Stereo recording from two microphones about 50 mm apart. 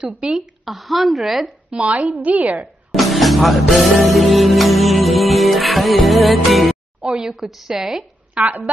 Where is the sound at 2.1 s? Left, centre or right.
Right.